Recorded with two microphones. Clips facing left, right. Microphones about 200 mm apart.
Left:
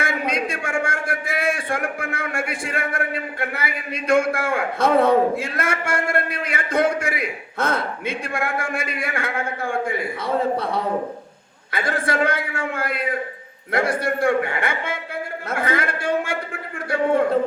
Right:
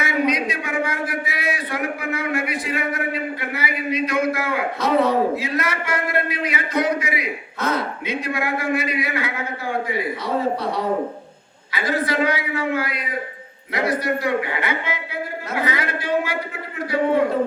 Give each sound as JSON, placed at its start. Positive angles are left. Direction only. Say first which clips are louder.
{"t": 0.0, "sound": "a man's voice", "louder": "right 3 dB", "side_deg": 50}
{"t": 11.7, "sound": "a man's voice", "louder": "right 1 dB", "side_deg": 50}